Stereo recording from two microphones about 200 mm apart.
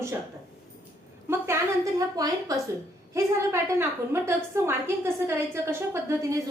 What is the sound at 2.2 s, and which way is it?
A woman's voice, 15° right (ahead or behind).